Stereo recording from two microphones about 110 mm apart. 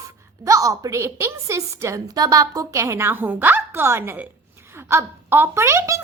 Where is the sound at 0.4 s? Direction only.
30° right (ahead or behind).